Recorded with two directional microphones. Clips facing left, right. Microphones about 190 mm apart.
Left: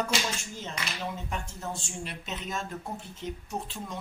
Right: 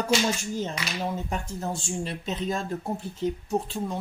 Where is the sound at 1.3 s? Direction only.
35° right (ahead or behind).